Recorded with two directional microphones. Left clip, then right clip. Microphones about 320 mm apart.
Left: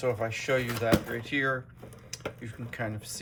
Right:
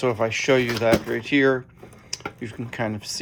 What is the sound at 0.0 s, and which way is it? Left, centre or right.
Speech, right.